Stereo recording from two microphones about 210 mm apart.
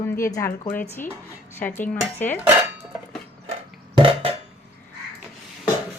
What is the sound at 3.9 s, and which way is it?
Burping, 25° right (ahead or behind).